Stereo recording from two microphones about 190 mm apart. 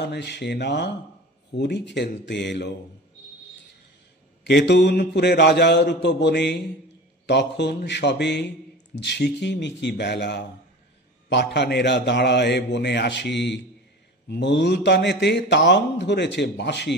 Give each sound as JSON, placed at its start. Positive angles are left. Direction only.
{"t": 0.0, "sound": "a man's voice", "side_deg": 60}
{"t": 4.5, "sound": "a man's voice", "side_deg": 65}